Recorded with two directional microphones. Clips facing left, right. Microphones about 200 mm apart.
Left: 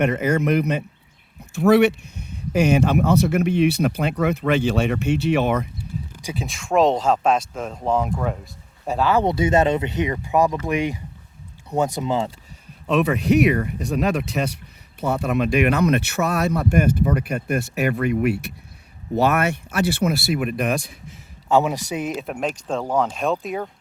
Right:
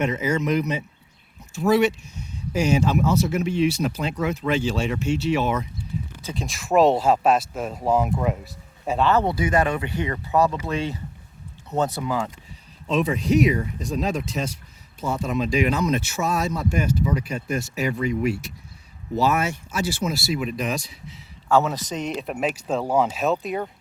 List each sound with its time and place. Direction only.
0.0 s speech: 60° left (ahead or behind)
6.2 s speech: 5° left (ahead or behind)
8.9 s speech: 5° left (ahead or behind)
9.2 s speech: 25° left (ahead or behind)
12.9 s speech: 65° left (ahead or behind)
21.5 s speech: 15° left (ahead or behind)